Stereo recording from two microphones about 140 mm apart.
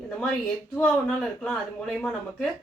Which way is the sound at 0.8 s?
5° left (ahead or behind).